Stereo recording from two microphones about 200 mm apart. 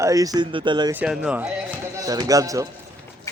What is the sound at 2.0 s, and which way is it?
Speech, 15° right (ahead or behind).